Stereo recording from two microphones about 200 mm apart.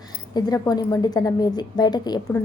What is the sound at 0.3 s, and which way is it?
A woman's voice, 20° left (ahead or behind).